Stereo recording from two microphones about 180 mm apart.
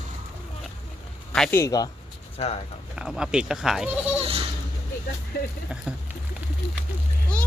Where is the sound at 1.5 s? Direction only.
20° left (ahead or behind).